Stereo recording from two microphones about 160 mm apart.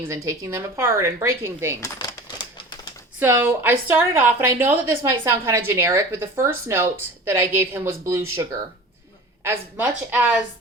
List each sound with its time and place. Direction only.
0.0 s a woman's voice: 20° right (ahead or behind)
3.2 s a woman's voice: 15° right (ahead or behind)